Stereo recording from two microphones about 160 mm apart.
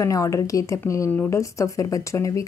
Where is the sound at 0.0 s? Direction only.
20° left (ahead or behind).